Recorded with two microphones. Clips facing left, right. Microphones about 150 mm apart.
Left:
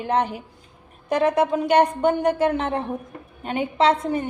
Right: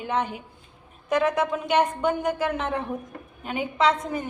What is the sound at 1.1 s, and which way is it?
A woman's voice, 35° left (ahead or behind).